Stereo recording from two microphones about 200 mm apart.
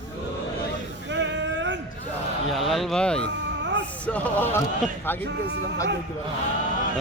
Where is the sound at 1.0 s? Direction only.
65° right (ahead or behind).